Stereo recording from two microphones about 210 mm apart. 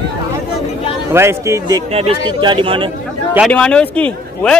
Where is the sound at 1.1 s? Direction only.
10° right (ahead or behind).